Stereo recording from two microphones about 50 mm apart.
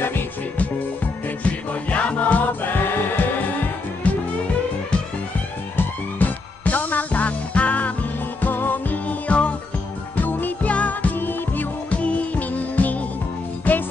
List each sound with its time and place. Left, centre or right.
1.4 s music: left
6.1 s music: left
10.1 s music: left
11.9 s music: left